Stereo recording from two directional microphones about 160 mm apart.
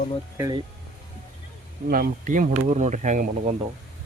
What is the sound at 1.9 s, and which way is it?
Speech, 60° right (ahead or behind).